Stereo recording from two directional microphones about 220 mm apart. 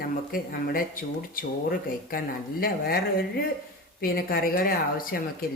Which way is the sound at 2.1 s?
40° left (ahead or behind).